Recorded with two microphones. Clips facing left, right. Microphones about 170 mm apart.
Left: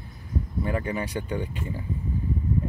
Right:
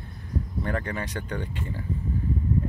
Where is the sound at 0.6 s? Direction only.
10° left (ahead or behind).